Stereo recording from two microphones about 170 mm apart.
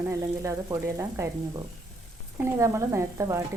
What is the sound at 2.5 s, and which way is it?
Frying, 15° right (ahead or behind).